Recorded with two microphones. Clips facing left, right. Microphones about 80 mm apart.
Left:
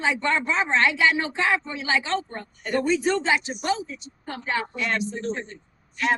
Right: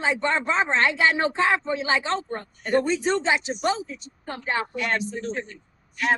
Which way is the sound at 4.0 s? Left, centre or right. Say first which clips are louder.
Even; right.